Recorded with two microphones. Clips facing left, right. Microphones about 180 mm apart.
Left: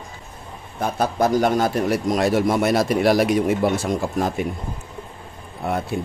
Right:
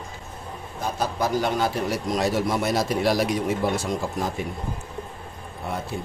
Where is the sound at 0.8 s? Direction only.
55° left (ahead or behind).